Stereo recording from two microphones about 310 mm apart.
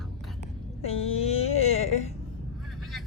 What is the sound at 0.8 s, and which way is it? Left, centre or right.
Speech, centre.